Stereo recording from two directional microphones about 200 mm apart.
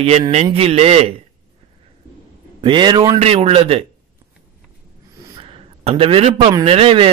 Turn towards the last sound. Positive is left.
turn(degrees=-30)  # may be behind; listen again after turning